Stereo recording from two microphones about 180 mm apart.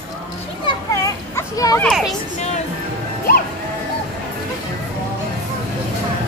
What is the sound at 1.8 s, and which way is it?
Speech, centre (ahead or behind).